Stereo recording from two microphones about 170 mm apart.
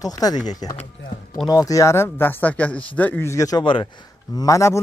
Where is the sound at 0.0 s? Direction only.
20° left (ahead or behind).